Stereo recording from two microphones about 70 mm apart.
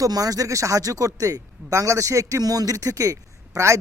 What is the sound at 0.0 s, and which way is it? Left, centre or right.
A man's voice, right.